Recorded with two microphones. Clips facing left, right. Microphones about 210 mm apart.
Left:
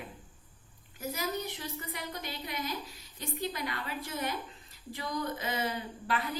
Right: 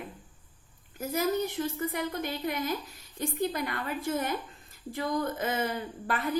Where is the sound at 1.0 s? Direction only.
50° right (ahead or behind).